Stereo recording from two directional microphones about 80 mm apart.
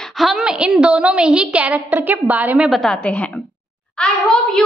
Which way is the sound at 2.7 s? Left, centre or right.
Centre.